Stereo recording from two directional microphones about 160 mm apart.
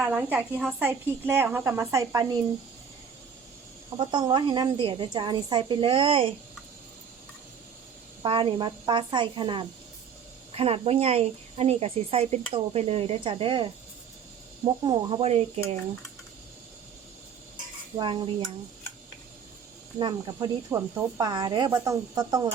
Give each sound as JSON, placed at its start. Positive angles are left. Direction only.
{"t": 0.0, "sound": "a woman's voice", "side_deg": -10}
{"t": 4.1, "sound": "speech", "side_deg": -30}
{"t": 8.2, "sound": "speech", "side_deg": -35}
{"t": 17.9, "sound": "speech", "side_deg": -30}
{"t": 20.0, "sound": "speech", "side_deg": -25}